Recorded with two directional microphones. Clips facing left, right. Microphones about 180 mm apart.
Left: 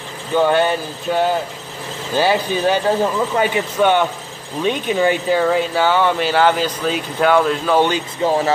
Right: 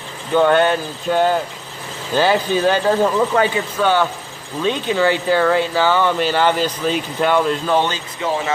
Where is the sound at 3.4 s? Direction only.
20° left (ahead or behind).